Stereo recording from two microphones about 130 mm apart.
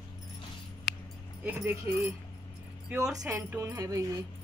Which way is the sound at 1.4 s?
15° right (ahead or behind).